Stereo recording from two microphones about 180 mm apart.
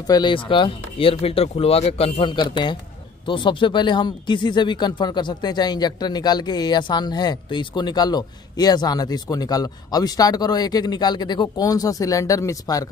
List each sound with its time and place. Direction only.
0.0 s speech: 25° left (ahead or behind)